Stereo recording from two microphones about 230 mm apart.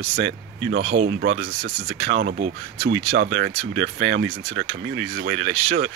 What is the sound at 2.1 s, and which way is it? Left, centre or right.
Speech, right.